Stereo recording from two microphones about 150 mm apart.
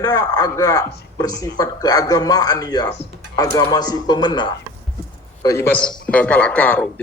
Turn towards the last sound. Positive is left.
turn(degrees=10)  # may be behind; listen again after turning